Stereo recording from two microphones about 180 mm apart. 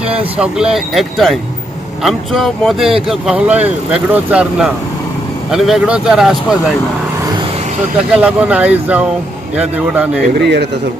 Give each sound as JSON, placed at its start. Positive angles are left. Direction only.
{"t": 0.3, "sound": "speech", "side_deg": -5}
{"t": 8.1, "sound": "speech", "side_deg": -5}
{"t": 10.3, "sound": "a man's voice", "side_deg": -70}